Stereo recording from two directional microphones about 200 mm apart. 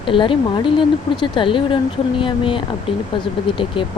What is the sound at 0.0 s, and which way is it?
Speech, 25° left (ahead or behind).